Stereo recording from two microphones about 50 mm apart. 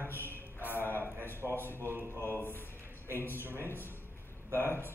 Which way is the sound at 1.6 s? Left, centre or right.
Left.